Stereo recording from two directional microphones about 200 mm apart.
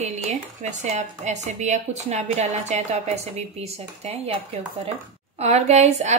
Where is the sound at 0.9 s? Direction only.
35° right (ahead or behind).